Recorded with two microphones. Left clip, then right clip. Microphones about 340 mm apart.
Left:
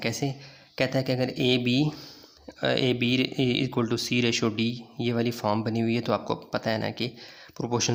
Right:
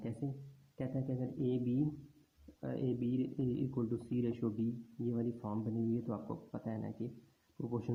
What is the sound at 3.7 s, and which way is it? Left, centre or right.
Speech, left.